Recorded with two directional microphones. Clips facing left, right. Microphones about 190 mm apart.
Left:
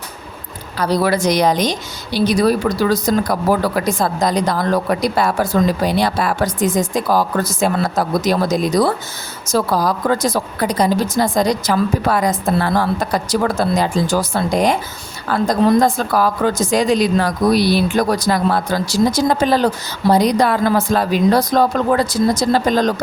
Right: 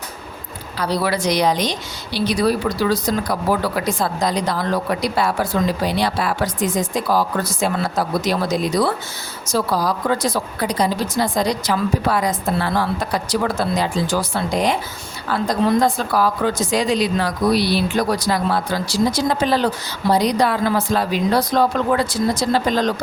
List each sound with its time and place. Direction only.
0.8 s a woman's voice: 45° left (ahead or behind)